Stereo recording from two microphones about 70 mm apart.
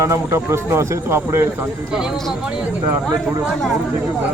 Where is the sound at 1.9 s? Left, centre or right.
Centre.